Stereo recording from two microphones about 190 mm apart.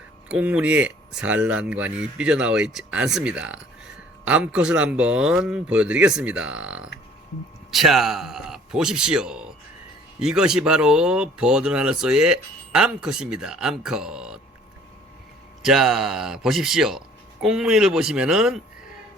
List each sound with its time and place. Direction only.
0.3 s speech: 5° right (ahead or behind)
15.6 s speech: centre (ahead or behind)